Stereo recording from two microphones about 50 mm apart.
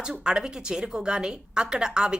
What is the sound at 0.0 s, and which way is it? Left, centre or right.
A woman's voice, centre.